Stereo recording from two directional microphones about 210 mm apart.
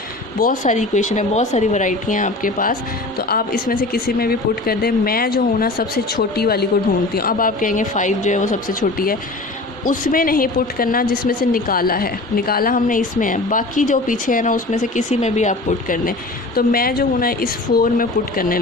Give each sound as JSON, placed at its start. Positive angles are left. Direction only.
{"t": 0.3, "sound": "a woman's voice", "side_deg": 40}